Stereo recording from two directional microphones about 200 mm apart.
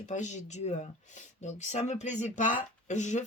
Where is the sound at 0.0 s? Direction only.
35° left (ahead or behind).